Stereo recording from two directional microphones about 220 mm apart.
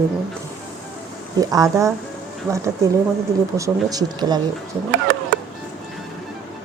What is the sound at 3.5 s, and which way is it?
Speech, 15° right (ahead or behind).